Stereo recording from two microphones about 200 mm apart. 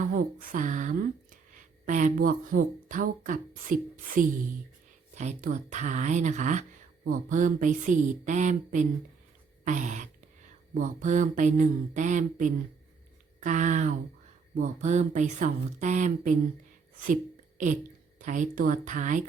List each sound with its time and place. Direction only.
0.0 s speech: 40° right (ahead or behind)
18.2 s speech: 40° right (ahead or behind)